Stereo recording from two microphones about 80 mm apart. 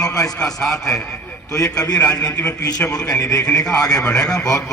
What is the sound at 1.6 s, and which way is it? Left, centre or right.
Speech, left.